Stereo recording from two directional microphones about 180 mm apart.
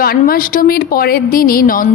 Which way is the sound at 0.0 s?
55° left (ahead or behind).